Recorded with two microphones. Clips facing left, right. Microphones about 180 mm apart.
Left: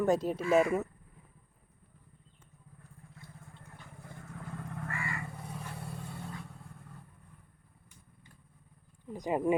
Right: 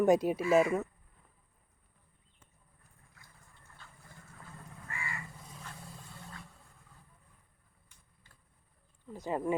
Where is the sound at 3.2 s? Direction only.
25° left (ahead or behind).